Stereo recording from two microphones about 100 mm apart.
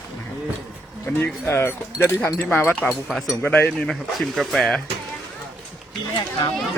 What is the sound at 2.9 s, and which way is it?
Speech, 5° right (ahead or behind).